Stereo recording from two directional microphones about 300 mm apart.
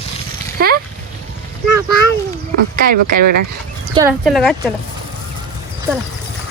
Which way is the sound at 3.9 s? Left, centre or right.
Centre.